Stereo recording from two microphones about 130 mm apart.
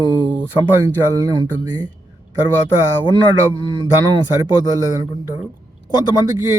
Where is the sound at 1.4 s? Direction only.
35° right (ahead or behind).